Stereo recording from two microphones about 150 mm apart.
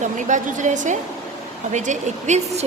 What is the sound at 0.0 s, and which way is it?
A woman's voice, 55° right (ahead or behind).